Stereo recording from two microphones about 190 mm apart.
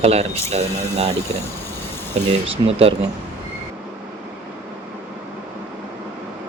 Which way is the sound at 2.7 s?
35° right (ahead or behind).